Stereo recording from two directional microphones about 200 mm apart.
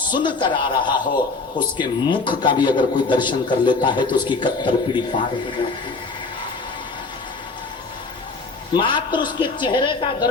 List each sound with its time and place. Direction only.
0.2 s a man's voice: 25° left (ahead or behind)
8.7 s a man's voice: 25° left (ahead or behind)